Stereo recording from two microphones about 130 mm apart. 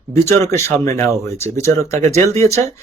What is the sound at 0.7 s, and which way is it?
Speech, 20° left (ahead or behind).